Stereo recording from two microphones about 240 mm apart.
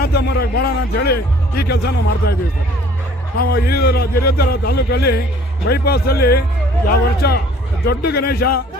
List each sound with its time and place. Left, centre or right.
0.0 s a man's voice: left
3.3 s a man's voice: left